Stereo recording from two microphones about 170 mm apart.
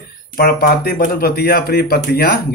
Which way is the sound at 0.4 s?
65° left (ahead or behind).